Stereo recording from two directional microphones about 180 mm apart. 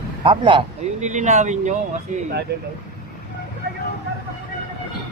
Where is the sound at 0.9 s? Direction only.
40° right (ahead or behind).